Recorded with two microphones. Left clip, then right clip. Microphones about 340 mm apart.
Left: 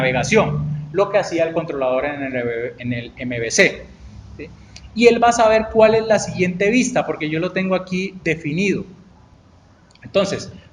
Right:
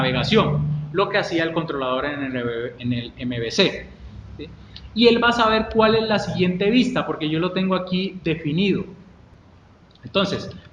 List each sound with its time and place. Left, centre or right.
0.0 s a man's voice: centre
4.9 s a man's voice: centre
10.1 s a man's voice: centre